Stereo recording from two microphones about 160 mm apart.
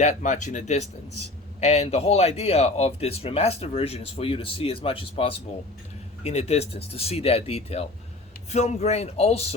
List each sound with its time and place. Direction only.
0.0 s speech: 45° left (ahead or behind)